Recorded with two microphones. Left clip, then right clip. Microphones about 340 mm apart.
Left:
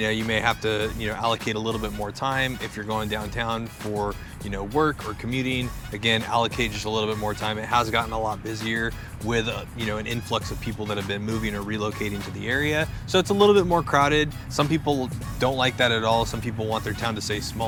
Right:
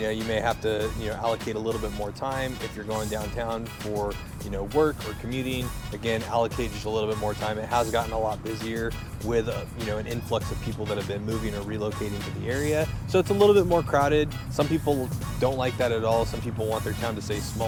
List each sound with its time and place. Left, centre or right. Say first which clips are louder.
0.0 s speech: left 3 dB; left
5.3 s speech: left 4 dB; left